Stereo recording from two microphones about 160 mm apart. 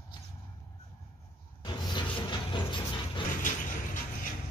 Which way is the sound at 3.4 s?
55° left (ahead or behind).